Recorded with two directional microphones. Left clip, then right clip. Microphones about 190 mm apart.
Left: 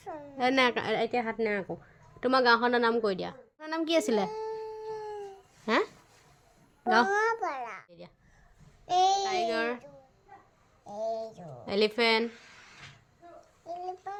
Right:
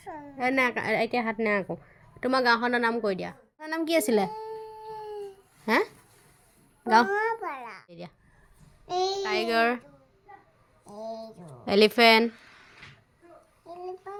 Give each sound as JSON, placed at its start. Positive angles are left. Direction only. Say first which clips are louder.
{"t": 0.0, "sound": "a woman's voice", "louder": "even", "side_deg": 10}
{"t": 0.9, "sound": "a woman's voice", "louder": "right 3 dB", "side_deg": -10}
{"t": 4.3, "sound": "a sound", "louder": "left 1 dB", "side_deg": 10}
{"t": 5.6, "sound": "a woman's voice", "louder": "right 3 dB", "side_deg": -10}
{"t": 7.1, "sound": "a child's voice", "louder": "even", "side_deg": 5}
{"t": 7.9, "sound": "speech", "louder": "right 6 dB", "side_deg": -40}
{"t": 8.9, "sound": "speech", "louder": "left 4 dB", "side_deg": 15}
{"t": 9.2, "sound": "a woman's voice", "louder": "right 4 dB", "side_deg": -40}
{"t": 10.8, "sound": "speech", "louder": "left 4 dB", "side_deg": 15}
{"t": 11.6, "sound": "a woman's voice", "louder": "right 7 dB", "side_deg": -40}
{"t": 13.7, "sound": "a child's voice", "louder": "left 1 dB", "side_deg": 15}